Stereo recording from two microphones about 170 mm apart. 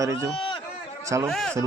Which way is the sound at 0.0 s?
15° right (ahead or behind).